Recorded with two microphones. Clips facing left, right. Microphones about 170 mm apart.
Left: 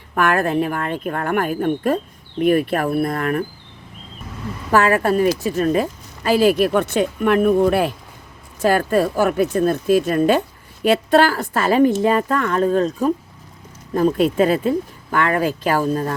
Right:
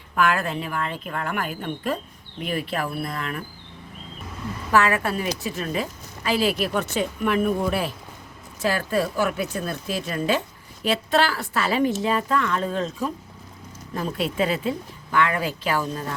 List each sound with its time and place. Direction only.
0.1 s speech: 55° left (ahead or behind)
4.7 s speech: 45° left (ahead or behind); by 7.9 s 60° left (ahead or behind)
8.6 s speech: 50° left (ahead or behind)